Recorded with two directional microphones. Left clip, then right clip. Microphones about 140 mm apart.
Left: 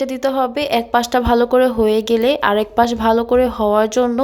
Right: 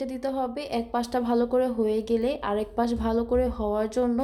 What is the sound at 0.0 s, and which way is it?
A woman's voice, 15° left (ahead or behind).